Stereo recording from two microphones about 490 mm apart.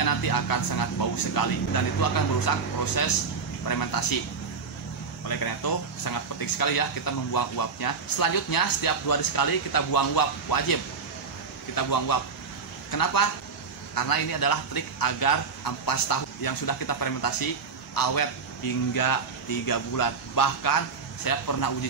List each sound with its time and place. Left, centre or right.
0.0 s speech: left
5.3 s speech: left